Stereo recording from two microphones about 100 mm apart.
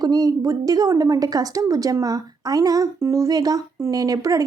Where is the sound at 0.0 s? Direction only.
40° right (ahead or behind).